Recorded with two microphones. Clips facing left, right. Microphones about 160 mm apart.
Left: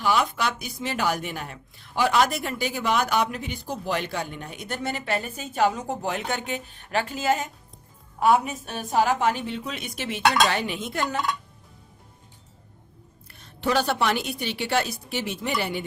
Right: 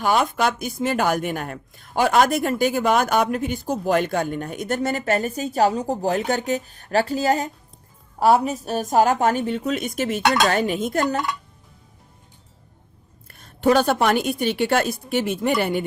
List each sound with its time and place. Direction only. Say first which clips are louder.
0.0 s a woman's voice: right 4 dB; 50° right (ahead or behind)
13.2 s a woman's voice: right 8 dB; 50° right (ahead or behind)